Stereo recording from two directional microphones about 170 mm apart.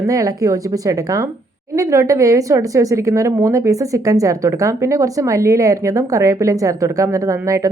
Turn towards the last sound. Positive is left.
turn(degrees=-20)  # may be behind; listen again after turning